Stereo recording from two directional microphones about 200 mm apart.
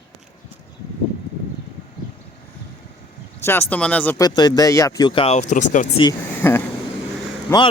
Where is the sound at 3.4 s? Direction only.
10° left (ahead or behind); by 6.0 s 35° left (ahead or behind).